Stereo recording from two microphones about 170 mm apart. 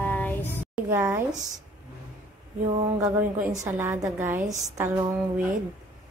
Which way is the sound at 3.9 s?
15° right (ahead or behind).